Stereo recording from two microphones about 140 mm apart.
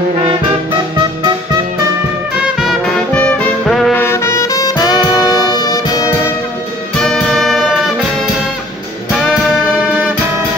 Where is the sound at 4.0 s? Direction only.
20° left (ahead or behind).